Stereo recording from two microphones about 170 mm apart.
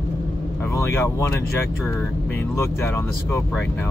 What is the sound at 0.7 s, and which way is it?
Speech, 15° left (ahead or behind).